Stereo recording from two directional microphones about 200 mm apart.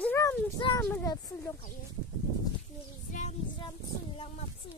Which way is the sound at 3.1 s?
40° left (ahead or behind).